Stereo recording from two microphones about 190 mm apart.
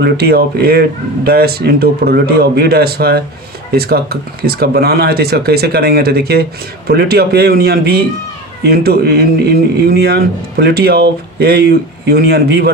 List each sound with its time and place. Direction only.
0.0 s a man's voice: 55° right (ahead or behind)